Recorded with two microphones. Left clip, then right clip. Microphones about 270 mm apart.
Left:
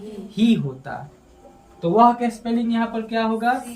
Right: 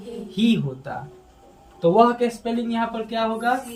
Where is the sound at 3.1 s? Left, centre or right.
Centre.